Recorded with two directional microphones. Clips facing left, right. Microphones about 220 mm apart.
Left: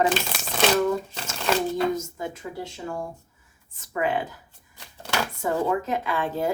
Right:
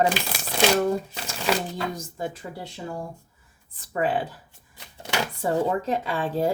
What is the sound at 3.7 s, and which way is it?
Speech, 35° right (ahead or behind).